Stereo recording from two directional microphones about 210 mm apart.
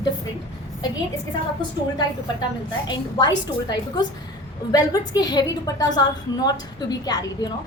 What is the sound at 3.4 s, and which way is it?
A woman's voice, 20° left (ahead or behind).